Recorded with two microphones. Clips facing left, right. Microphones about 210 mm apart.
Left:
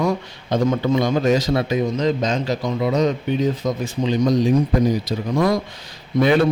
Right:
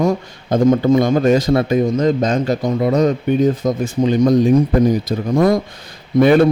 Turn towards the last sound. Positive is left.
turn(degrees=-55)  # may be behind; listen again after turning